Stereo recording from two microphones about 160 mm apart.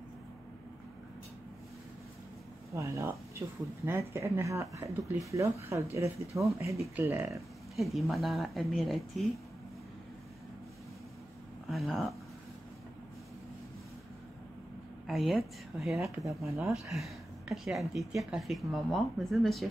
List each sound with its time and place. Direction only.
2.7 s speech: 20° right (ahead or behind)
7.7 s speech: centre (ahead or behind)
11.7 s speech: centre (ahead or behind)
15.0 s speech: centre (ahead or behind)